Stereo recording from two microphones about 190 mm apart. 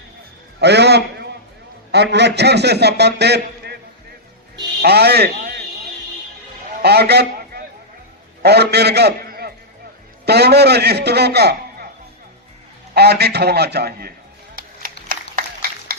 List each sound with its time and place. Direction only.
0.6 s a man's voice: 60° right (ahead or behind)
4.8 s a man's voice: 60° right (ahead or behind)
6.8 s a man's voice: 60° right (ahead or behind)
12.9 s a man's voice: 60° right (ahead or behind)
14.5 s music: 45° right (ahead or behind)